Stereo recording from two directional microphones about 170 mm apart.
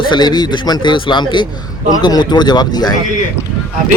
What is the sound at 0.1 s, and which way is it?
A man's voice, 25° left (ahead or behind).